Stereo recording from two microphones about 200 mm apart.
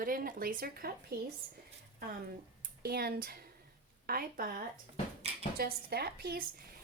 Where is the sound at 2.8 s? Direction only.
50° right (ahead or behind).